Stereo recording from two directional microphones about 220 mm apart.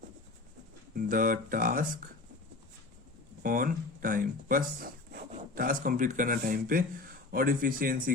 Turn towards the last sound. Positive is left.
turn(degrees=-40)  # may be behind; listen again after turning